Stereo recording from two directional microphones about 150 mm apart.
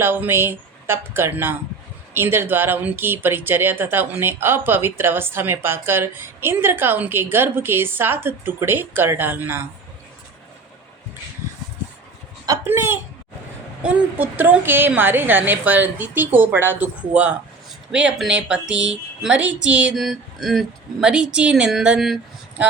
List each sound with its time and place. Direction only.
0.0 s speech: 15° right (ahead or behind)
12.5 s speech: 15° right (ahead or behind)